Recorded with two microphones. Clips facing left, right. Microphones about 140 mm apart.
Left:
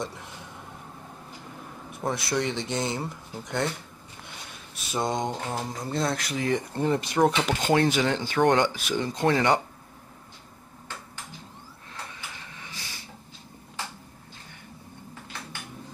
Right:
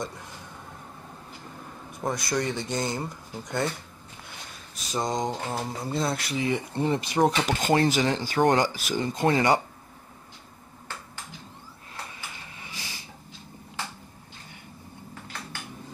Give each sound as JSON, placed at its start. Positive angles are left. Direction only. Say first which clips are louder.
{"t": 0.0, "sound": "speech", "louder": "even", "side_deg": 0}
{"t": 1.9, "sound": "speech", "louder": "even", "side_deg": 0}
{"t": 4.7, "sound": "speech", "louder": "even", "side_deg": 5}